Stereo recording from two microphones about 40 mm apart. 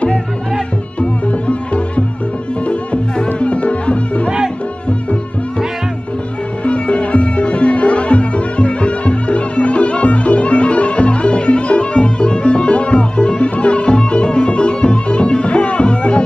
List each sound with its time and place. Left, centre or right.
1.5 s music: left
3.3 s music: left
6.6 s music: left